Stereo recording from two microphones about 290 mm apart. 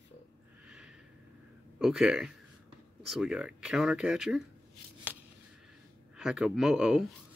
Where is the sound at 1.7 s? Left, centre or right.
Centre.